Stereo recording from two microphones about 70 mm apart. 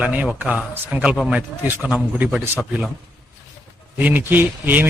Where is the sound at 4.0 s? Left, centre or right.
Right.